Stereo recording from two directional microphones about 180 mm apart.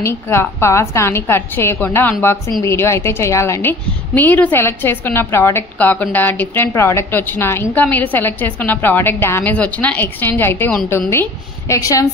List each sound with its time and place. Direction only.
0.0 s a woman's voice: 15° left (ahead or behind)